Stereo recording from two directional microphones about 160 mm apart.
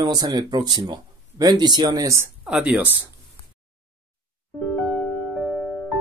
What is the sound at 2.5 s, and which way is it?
Speech, 5° right (ahead or behind).